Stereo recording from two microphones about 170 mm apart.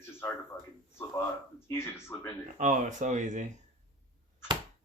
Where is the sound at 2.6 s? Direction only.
45° right (ahead or behind).